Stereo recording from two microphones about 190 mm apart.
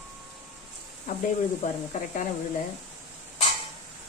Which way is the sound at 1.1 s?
45° left (ahead or behind).